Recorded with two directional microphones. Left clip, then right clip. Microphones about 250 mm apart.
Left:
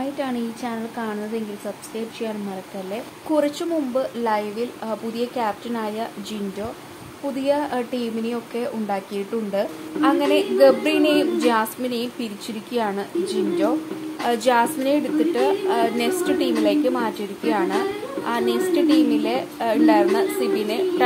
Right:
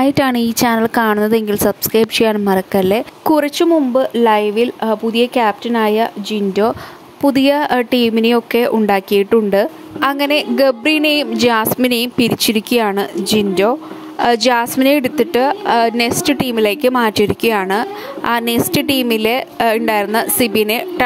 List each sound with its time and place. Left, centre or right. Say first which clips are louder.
0.0 s speech: right 12 dB; right